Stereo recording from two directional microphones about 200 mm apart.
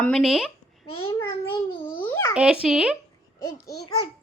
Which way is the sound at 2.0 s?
10° left (ahead or behind).